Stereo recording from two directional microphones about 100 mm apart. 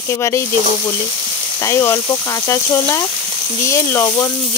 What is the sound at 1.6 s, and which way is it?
Speech, 30° left (ahead or behind).